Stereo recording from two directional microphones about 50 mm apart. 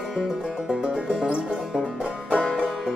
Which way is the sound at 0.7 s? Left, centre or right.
Right.